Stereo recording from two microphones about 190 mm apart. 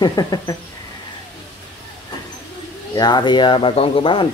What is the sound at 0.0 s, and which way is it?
Speech, 20° left (ahead or behind).